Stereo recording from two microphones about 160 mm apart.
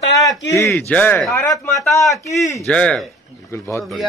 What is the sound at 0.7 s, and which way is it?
A man's voice, 10° left (ahead or behind).